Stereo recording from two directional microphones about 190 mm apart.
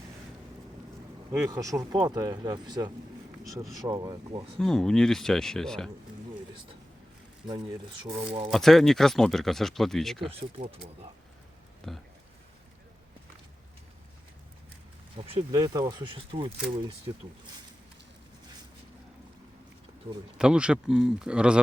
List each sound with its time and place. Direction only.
1.3 s speech: 15° right (ahead or behind)
4.6 s speech: 5° left (ahead or behind)
7.4 s speech: 20° right (ahead or behind)
8.4 s speech: centre (ahead or behind)
10.2 s speech: 30° right (ahead or behind)
11.8 s speech: 5° left (ahead or behind)
15.1 s speech: 25° right (ahead or behind)
20.4 s speech: 5° right (ahead or behind)